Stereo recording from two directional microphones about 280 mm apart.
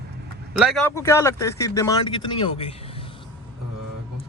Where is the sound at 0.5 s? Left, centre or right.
Centre.